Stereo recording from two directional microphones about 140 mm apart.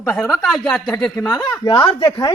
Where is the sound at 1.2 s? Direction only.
25° left (ahead or behind).